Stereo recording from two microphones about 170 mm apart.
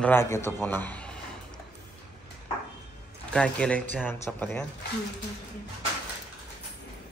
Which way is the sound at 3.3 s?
5° left (ahead or behind).